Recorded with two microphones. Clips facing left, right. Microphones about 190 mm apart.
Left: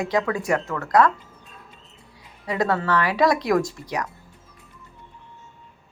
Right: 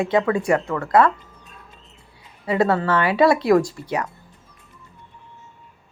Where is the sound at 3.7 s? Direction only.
30° right (ahead or behind).